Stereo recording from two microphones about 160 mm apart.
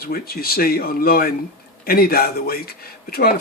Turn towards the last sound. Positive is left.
turn(degrees=70)  # may be behind; listen again after turning